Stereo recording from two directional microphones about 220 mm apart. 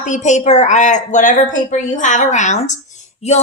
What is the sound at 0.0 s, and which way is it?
A woman's voice, 30° left (ahead or behind).